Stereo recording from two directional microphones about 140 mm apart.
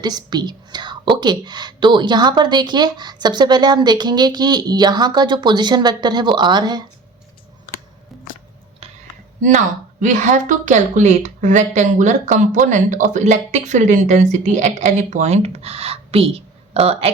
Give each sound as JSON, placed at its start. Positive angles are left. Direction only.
{"t": 0.0, "sound": "a woman's voice", "side_deg": -30}
{"t": 8.8, "sound": "a sound", "side_deg": -45}
{"t": 10.0, "sound": "a woman's voice", "side_deg": -60}